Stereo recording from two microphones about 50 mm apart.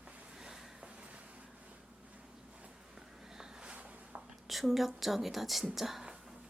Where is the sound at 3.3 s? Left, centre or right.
Centre; by 4.2 s right.